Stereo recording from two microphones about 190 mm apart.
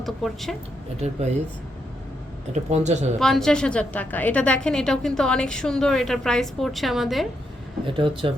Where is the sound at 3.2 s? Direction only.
Centre (ahead or behind).